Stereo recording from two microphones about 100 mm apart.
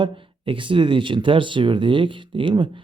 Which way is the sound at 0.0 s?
55° right (ahead or behind).